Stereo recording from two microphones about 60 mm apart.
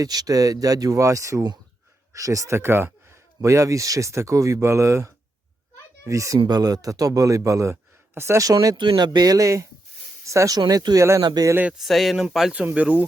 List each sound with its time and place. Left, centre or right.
0.0 s speech: right
3.4 s speech: right
6.1 s speech: right
8.1 s speech: right
8.4 s speech: right
11.8 s speech: centre
12.7 s speech: right